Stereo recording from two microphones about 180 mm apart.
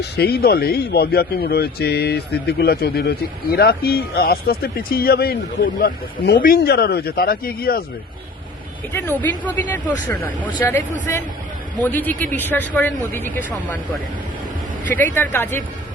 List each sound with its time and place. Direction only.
0.0 s a man's voice: 60° left (ahead or behind)
8.9 s speech: 10° left (ahead or behind)
14.8 s speech: 10° left (ahead or behind)